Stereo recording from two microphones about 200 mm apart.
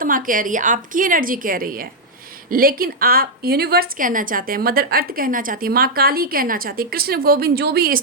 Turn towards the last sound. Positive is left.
turn(degrees=-50)  # may be behind; listen again after turning